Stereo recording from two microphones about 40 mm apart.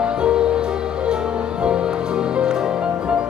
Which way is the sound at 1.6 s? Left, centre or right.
Right.